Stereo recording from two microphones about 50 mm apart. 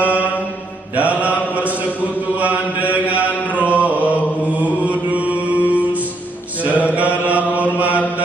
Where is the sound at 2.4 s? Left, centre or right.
Right.